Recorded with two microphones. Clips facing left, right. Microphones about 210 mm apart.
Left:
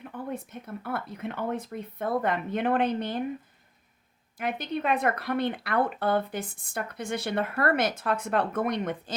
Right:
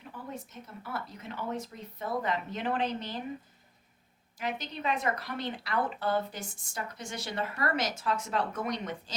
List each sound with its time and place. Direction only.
0.0 s speech: 55° left (ahead or behind)
4.4 s speech: 55° left (ahead or behind)